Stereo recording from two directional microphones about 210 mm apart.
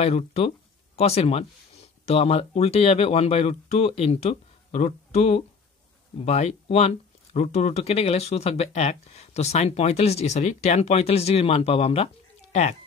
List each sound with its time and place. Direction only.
0.0 s speech: 30° left (ahead or behind)